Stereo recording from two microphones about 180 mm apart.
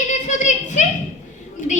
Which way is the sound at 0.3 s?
45° left (ahead or behind).